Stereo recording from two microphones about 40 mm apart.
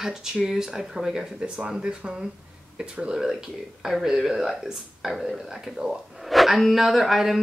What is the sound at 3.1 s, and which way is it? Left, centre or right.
Speech, centre.